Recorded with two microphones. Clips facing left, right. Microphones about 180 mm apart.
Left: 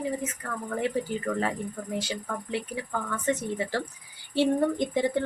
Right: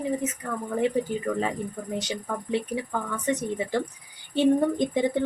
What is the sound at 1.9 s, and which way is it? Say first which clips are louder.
Speech: right 2 dB; 20° right (ahead or behind).